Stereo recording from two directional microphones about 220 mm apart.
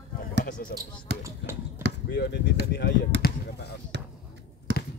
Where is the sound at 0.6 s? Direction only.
40° left (ahead or behind).